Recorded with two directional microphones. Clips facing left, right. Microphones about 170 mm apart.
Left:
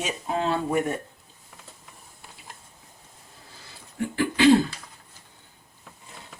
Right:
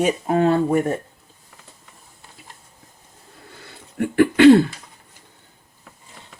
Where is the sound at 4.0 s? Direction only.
60° right (ahead or behind).